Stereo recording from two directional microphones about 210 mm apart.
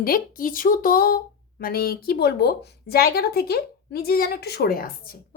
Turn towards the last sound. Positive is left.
turn(degrees=45)  # may be behind; listen again after turning